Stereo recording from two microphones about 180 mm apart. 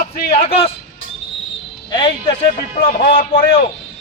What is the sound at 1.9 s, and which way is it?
Speech, 25° left (ahead or behind).